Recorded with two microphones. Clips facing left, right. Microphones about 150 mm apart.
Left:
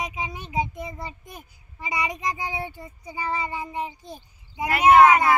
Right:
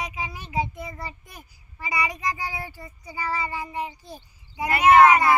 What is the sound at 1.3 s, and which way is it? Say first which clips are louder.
Speech: left 2 dB; 20° left (ahead or behind).